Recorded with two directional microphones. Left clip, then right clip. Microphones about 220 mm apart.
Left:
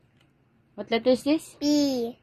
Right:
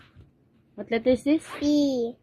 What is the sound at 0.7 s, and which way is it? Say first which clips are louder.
Speech: even; 20° left (ahead or behind).